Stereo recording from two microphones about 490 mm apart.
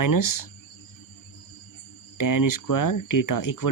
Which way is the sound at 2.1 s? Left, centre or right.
Left.